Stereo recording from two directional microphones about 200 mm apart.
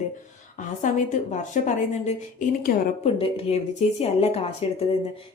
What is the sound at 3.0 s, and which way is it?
A woman's voice, 30° left (ahead or behind).